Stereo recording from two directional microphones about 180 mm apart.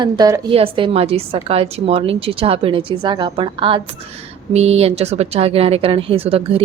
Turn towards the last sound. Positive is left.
turn(degrees=-30)  # may be behind; listen again after turning